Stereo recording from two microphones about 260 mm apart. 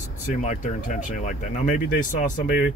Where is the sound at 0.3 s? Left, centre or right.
Left.